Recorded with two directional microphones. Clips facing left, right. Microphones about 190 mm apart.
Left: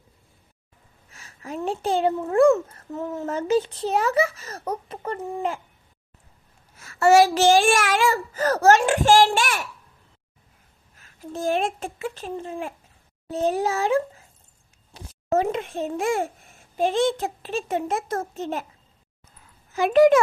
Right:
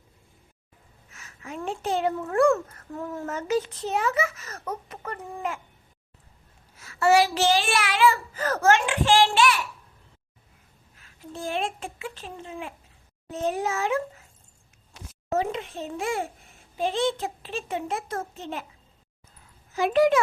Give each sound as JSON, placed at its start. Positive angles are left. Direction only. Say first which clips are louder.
{"t": 1.1, "sound": "a sound", "louder": "left 4 dB", "side_deg": 35}
{"t": 1.5, "sound": "a child's voice", "louder": "left 4 dB", "side_deg": 35}
{"t": 2.1, "sound": "speech", "louder": "left 4 dB", "side_deg": 20}
{"t": 3.2, "sound": "a child's voice", "louder": "left 4 dB", "side_deg": 30}
{"t": 6.7, "sound": "speech", "louder": "left 4 dB", "side_deg": 45}
{"t": 11.0, "sound": "speech", "louder": "left 7 dB", "side_deg": 45}
{"t": 13.3, "sound": "a child's voice", "louder": "left 4 dB", "side_deg": 35}
{"t": 15.3, "sound": "speech", "louder": "left 4 dB", "side_deg": 50}
{"t": 19.7, "sound": "speech", "louder": "left 5 dB", "side_deg": 55}